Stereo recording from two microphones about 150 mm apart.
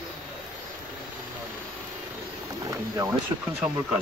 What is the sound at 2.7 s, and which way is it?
Speech, 20° right (ahead or behind).